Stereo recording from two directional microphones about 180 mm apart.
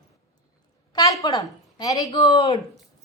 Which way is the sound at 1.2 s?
20° left (ahead or behind).